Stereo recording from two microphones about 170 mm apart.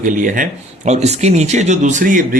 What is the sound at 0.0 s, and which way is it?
Speech, 50° right (ahead or behind).